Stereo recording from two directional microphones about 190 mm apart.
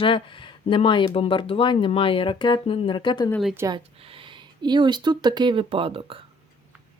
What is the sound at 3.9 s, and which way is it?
Speech, 30° right (ahead or behind).